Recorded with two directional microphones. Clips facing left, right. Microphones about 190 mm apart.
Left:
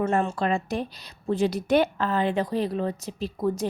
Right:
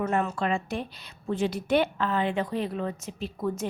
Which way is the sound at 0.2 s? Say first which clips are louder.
Left 2 dB; 30° left (ahead or behind).